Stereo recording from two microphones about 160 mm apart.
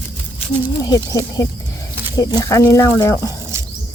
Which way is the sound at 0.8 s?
20° left (ahead or behind).